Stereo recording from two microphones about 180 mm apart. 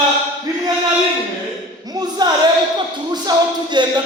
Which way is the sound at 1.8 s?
20° right (ahead or behind).